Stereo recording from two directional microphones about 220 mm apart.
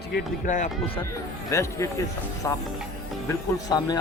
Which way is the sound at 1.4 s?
15° left (ahead or behind).